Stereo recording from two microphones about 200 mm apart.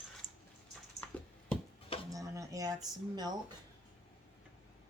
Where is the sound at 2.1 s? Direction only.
15° right (ahead or behind).